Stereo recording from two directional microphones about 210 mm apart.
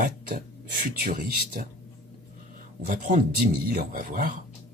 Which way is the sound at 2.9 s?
40° right (ahead or behind).